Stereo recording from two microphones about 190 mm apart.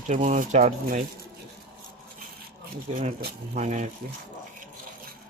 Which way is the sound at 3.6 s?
40° right (ahead or behind).